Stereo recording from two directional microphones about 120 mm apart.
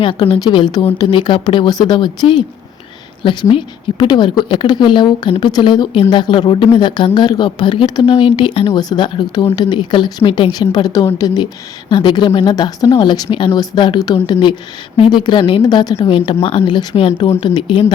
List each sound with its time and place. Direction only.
0.0 s a woman's voice: 45° left (ahead or behind)
3.5 s a woman's voice: 40° left (ahead or behind)
16.0 s speech: 50° left (ahead or behind)
17.4 s a woman's voice: 40° left (ahead or behind)